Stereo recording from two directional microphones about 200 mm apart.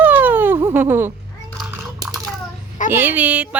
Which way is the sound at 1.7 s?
15° right (ahead or behind).